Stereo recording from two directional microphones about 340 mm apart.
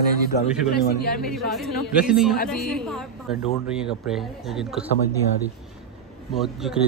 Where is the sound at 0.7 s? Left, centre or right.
Left.